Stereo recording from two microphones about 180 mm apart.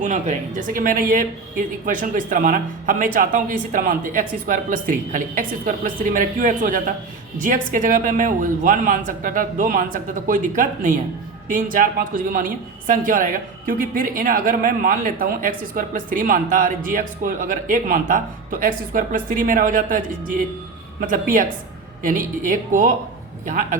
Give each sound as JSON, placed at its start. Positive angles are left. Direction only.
{"t": 0.0, "sound": "a woman's voice", "side_deg": -45}